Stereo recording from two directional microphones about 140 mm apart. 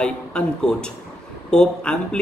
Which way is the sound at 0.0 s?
5° left (ahead or behind).